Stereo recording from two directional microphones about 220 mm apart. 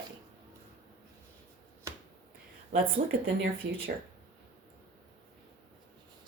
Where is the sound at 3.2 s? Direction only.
50° right (ahead or behind).